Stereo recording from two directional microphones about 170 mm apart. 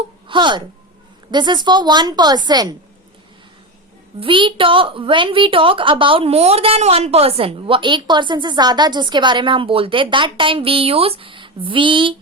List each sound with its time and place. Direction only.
0.3 s a woman's voice: 25° right (ahead or behind)
4.2 s a woman's voice: 30° right (ahead or behind)